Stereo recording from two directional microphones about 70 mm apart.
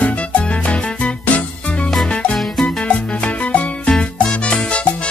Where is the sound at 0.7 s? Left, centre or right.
Centre.